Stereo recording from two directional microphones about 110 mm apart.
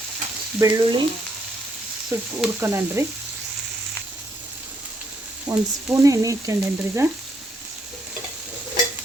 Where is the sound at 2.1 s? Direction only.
25° right (ahead or behind).